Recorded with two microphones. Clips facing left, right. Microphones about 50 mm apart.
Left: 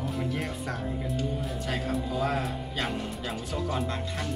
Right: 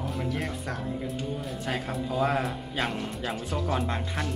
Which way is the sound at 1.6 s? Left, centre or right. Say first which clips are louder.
Even; centre.